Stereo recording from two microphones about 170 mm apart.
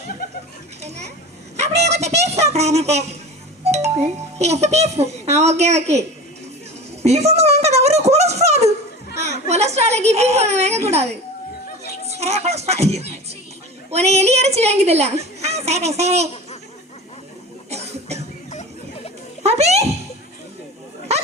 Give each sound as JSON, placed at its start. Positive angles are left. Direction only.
{"t": 0.8, "sound": "a child's voice", "side_deg": -40}
{"t": 7.0, "sound": "a child's voice", "side_deg": -40}
{"t": 17.7, "sound": "cough", "side_deg": -40}
{"t": 19.4, "sound": "a sound", "side_deg": -40}